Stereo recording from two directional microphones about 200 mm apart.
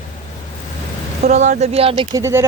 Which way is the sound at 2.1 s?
15° right (ahead or behind).